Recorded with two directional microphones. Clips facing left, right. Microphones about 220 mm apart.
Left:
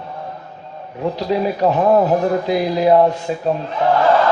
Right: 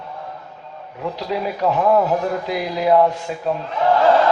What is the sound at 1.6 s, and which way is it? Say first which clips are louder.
A man's voice: left 2 dB; 30° left (ahead or behind).